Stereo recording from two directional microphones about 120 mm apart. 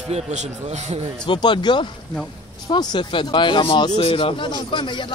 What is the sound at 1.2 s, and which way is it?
Speech, 40° left (ahead or behind).